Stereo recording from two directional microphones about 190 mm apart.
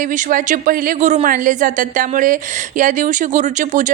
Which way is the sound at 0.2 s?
45° right (ahead or behind).